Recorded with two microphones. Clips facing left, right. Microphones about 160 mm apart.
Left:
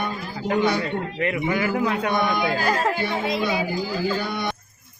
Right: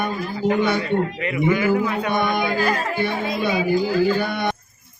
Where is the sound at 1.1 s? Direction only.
50° left (ahead or behind).